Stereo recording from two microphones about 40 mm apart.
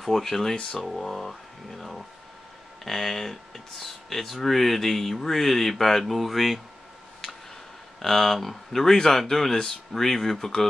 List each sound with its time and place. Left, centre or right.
0.0 s speech: centre
8.0 s speech: centre